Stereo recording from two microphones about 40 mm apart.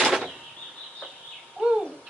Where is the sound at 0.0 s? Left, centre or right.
Centre.